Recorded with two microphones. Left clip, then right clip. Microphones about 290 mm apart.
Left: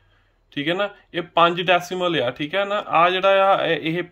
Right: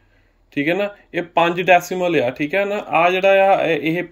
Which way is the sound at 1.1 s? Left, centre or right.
Centre.